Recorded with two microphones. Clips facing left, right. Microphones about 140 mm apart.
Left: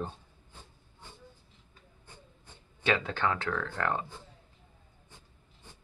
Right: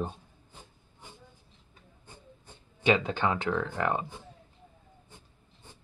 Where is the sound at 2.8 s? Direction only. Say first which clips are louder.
Right 3 dB; 15° right (ahead or behind).